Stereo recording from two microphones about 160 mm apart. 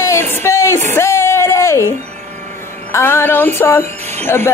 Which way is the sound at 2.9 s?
15° left (ahead or behind).